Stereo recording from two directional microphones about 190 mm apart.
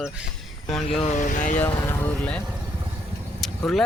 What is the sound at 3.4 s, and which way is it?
Vehicle, centre (ahead or behind).